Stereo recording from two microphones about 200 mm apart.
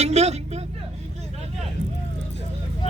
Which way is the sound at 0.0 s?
35° right (ahead or behind).